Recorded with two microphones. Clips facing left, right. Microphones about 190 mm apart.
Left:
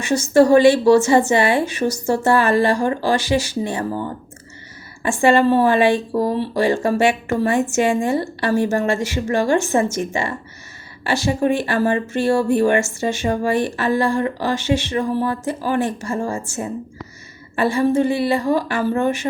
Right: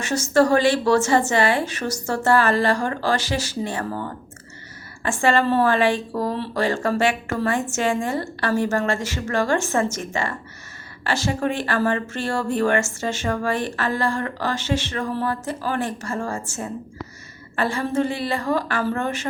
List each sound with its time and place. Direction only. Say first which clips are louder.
0.0 s speech: left 4 dB; 15° left (ahead or behind)
5.0 s speech: left 5 dB; 15° left (ahead or behind)